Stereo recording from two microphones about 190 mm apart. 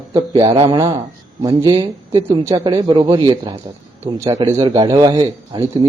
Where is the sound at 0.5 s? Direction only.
30° right (ahead or behind).